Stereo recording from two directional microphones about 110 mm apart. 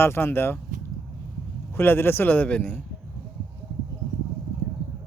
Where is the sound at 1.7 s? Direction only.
20° left (ahead or behind).